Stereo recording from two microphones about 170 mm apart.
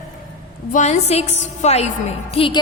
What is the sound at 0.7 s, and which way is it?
A woman's voice, 45° left (ahead or behind).